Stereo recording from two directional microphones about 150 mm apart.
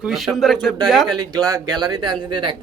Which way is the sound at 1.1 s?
25° right (ahead or behind).